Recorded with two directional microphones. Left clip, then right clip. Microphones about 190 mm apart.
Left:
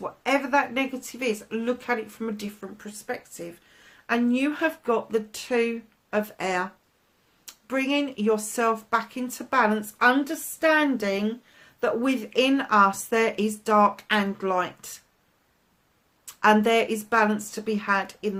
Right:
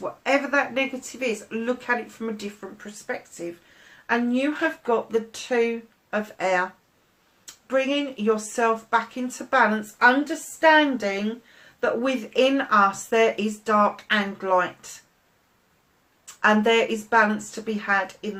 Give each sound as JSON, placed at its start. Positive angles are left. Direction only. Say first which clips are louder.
{"t": 0.2, "sound": "a woman's voice", "louder": "right 1 dB", "side_deg": 45}
{"t": 16.2, "sound": "speech", "louder": "even", "side_deg": 55}